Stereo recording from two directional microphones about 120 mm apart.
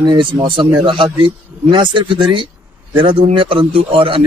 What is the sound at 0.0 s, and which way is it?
A man's voice, 40° right (ahead or behind).